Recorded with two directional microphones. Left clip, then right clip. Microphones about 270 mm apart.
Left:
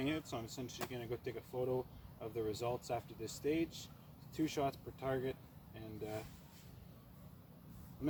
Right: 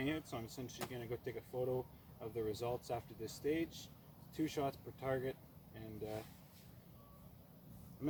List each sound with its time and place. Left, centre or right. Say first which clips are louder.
0.0 s speech: left 1 dB; centre